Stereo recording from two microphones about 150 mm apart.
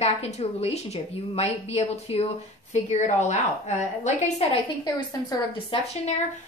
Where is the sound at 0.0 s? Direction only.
45° left (ahead or behind).